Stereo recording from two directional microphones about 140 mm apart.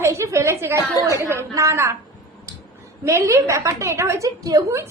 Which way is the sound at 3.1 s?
20° right (ahead or behind).